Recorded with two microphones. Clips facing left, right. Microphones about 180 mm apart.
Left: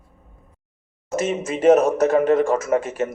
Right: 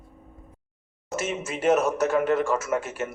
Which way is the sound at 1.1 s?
40° left (ahead or behind).